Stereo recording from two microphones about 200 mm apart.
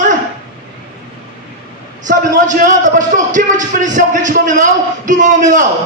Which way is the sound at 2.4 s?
40° right (ahead or behind).